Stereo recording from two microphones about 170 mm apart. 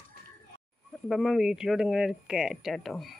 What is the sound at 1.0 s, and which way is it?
Speech, centre (ahead or behind).